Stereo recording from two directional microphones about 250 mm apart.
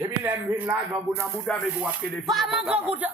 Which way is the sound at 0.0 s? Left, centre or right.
Centre.